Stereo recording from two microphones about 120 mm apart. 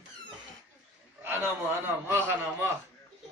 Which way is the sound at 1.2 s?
20° right (ahead or behind).